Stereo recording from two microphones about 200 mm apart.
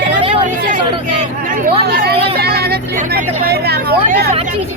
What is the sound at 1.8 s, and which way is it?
Speech, 55° right (ahead or behind).